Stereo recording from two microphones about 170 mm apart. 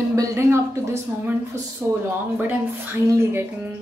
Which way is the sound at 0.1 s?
15° right (ahead or behind).